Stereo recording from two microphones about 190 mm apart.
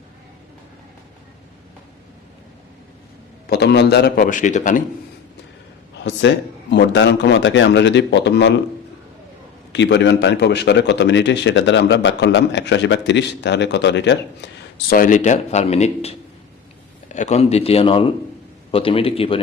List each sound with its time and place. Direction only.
3.5 s a man's voice: 60° left (ahead or behind); by 4.8 s 40° left (ahead or behind)
6.1 s a man's voice: 65° left (ahead or behind)
9.7 s a man's voice: 65° left (ahead or behind)
14.9 s a man's voice: 45° left (ahead or behind)